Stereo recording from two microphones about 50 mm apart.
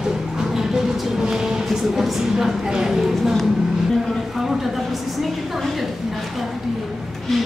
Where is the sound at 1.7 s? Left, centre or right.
Centre.